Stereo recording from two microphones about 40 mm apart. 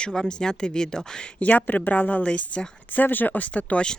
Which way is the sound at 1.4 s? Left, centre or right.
Left.